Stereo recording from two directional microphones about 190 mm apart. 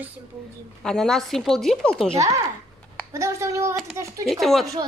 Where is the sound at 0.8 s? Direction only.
Centre (ahead or behind).